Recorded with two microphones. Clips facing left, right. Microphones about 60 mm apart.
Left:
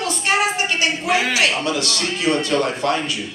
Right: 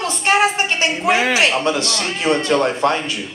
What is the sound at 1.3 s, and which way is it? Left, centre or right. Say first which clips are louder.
Speech: right 3 dB; right.